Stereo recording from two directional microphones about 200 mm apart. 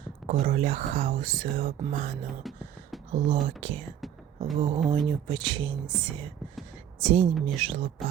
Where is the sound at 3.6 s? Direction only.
30° right (ahead or behind).